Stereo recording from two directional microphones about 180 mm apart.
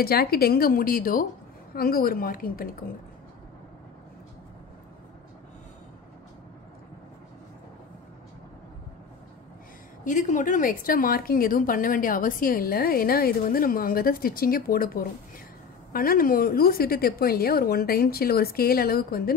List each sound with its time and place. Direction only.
0.0 s a woman's voice: 60° left (ahead or behind)
10.0 s a woman's voice: 45° left (ahead or behind)